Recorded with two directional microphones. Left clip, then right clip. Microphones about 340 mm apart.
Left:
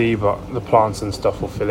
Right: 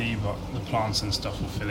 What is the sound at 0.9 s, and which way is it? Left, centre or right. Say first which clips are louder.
Speech: left 9 dB; centre.